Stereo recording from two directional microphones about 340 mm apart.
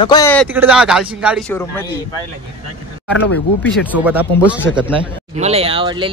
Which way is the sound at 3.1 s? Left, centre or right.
Left.